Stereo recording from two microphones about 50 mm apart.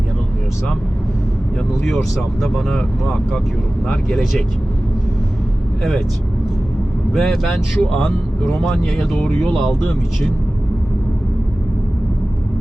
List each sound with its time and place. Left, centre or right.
2.4 s speech: centre
7.1 s speech: centre
7.8 s speech: centre